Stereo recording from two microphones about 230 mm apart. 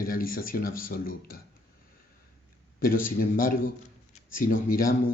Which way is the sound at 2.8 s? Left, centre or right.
Left.